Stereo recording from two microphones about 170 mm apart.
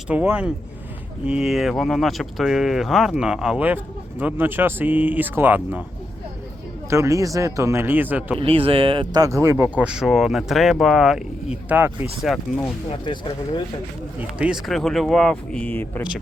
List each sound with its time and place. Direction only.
0.1 s speech: 10° right (ahead or behind)
6.9 s speech: 15° right (ahead or behind)
8.4 s speech: 35° right (ahead or behind); by 12.4 s 5° right (ahead or behind)
12.9 s speech: 30° left (ahead or behind)
14.2 s speech: 5° right (ahead or behind); by 16.0 s 10° left (ahead or behind)